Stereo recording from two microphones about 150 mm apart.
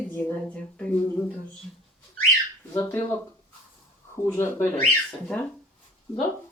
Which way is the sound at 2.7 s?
15° left (ahead or behind).